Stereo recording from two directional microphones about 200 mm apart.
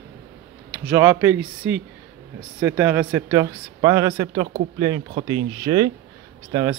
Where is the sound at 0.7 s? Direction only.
10° right (ahead or behind).